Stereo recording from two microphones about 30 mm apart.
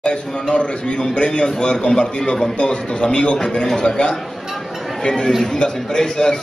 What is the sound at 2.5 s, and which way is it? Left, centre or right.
A man's voice, left.